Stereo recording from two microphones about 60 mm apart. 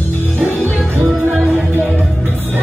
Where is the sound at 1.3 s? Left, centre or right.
Right.